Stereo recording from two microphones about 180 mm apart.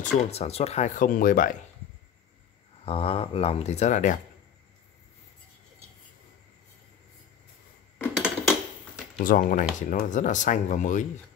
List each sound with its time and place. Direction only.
0.0 s speech: 40° left (ahead or behind)
2.8 s speech: 30° left (ahead or behind)
8.2 s dishes: 5° right (ahead or behind)
9.2 s speech: 50° left (ahead or behind)